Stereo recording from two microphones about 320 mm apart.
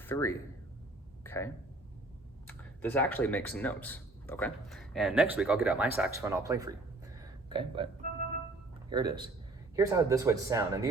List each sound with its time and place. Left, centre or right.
0.0 s speech: centre
1.2 s a sound: centre
2.5 s speech: centre
8.9 s speech: centre